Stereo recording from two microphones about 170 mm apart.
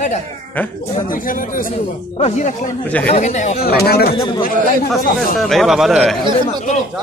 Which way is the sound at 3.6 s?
65° left (ahead or behind).